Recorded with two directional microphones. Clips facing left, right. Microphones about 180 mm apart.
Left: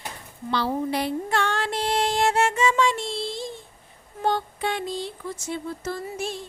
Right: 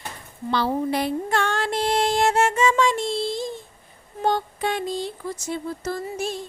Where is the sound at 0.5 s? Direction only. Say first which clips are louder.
Right 2 dB; 50° right (ahead or behind).